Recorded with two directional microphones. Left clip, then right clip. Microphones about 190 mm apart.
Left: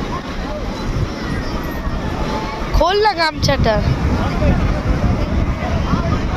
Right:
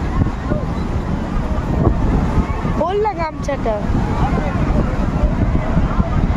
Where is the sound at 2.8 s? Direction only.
Centre (ahead or behind).